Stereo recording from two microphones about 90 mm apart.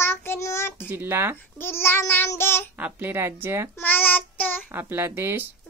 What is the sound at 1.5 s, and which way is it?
Child singing, 25° left (ahead or behind).